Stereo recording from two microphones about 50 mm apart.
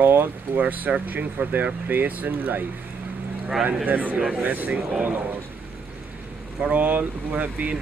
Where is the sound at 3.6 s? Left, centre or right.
Right.